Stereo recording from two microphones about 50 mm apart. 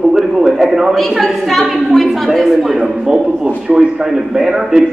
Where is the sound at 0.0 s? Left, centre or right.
Centre.